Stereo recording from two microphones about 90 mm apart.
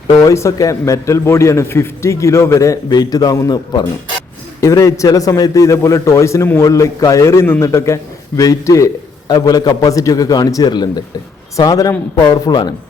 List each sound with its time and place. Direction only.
0.2 s a man's voice: 35° left (ahead or behind)
4.6 s a man's voice: 35° left (ahead or behind)
9.2 s a man's voice: 50° left (ahead or behind)